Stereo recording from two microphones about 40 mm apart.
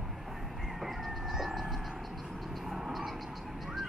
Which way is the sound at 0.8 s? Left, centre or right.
Centre.